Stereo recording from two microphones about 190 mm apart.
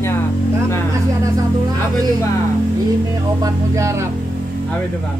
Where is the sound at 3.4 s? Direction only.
15° right (ahead or behind).